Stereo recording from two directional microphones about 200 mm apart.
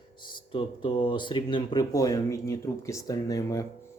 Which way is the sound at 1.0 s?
25° left (ahead or behind).